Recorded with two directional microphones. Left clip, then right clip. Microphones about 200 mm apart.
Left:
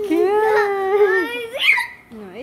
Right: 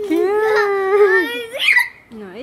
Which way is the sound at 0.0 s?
5° right (ahead or behind).